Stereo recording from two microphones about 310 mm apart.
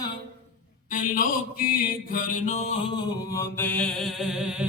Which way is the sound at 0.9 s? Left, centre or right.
Left.